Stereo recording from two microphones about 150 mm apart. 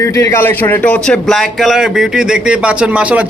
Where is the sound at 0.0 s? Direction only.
20° left (ahead or behind).